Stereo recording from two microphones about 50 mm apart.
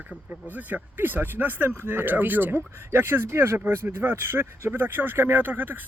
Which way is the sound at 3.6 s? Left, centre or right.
Right.